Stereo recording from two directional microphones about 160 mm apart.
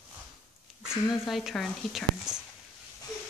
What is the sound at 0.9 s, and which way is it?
Speech, centre (ahead or behind).